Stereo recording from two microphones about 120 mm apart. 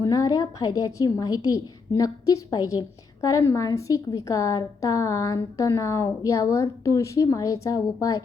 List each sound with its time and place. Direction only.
0.0 s a woman's voice: 30° left (ahead or behind)